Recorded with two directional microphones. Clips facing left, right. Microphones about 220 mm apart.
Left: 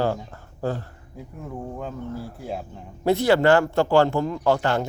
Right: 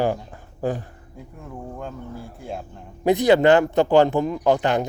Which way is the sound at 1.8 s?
5° left (ahead or behind).